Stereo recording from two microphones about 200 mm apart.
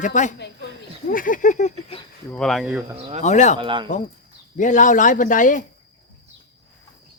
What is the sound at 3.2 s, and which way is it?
Speech, 35° left (ahead or behind).